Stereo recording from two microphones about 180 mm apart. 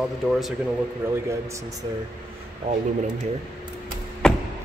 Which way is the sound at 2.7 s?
35° right (ahead or behind).